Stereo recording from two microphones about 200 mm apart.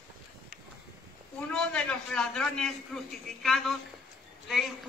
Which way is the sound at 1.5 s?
5° left (ahead or behind).